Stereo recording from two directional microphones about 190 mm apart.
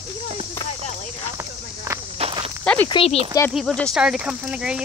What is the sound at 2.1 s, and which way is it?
Walk, 30° right (ahead or behind).